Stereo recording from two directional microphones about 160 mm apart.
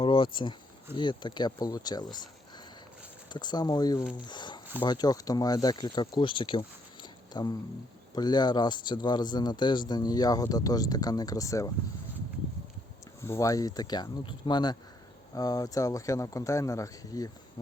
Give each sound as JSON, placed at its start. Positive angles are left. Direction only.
{"t": 0.0, "sound": "speech", "side_deg": 30}
{"t": 3.3, "sound": "speech", "side_deg": 25}
{"t": 4.3, "sound": "a sound", "side_deg": 30}
{"t": 4.8, "sound": "speech", "side_deg": 25}
{"t": 13.2, "sound": "speech", "side_deg": 20}